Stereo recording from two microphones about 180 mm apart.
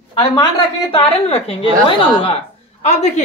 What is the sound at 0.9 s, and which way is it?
A woman's voice, 30° left (ahead or behind).